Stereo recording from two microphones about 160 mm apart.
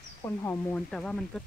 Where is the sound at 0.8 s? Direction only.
5° left (ahead or behind).